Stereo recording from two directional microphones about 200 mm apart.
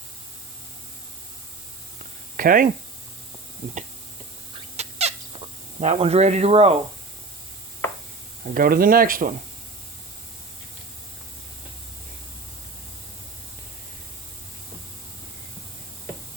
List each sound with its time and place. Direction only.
2.3 s speech: 45° right (ahead or behind)
4.8 s squeak: 30° right (ahead or behind)
5.8 s speech: 35° right (ahead or behind)
8.5 s speech: 45° right (ahead or behind)